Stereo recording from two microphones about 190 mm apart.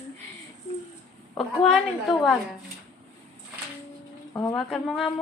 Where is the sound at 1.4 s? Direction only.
Centre (ahead or behind).